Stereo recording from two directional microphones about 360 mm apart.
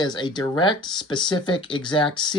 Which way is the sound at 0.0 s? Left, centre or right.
Centre.